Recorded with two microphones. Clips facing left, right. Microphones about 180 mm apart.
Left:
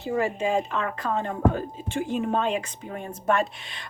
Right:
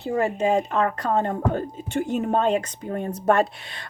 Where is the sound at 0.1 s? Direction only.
40° right (ahead or behind).